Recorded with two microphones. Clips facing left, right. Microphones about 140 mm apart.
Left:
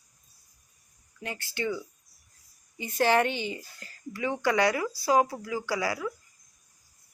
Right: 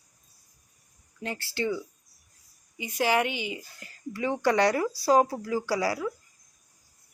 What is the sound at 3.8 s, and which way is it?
Speech, 25° right (ahead or behind).